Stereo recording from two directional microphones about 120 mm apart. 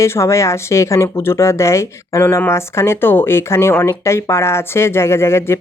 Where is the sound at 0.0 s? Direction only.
25° left (ahead or behind).